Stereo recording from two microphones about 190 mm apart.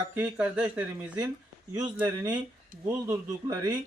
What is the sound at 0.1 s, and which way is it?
Speech, 10° right (ahead or behind).